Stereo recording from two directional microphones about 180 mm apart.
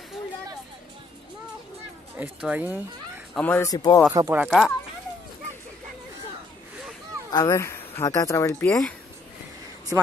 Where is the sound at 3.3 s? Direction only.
10° left (ahead or behind).